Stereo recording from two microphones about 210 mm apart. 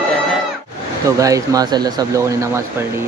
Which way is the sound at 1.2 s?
15° right (ahead or behind).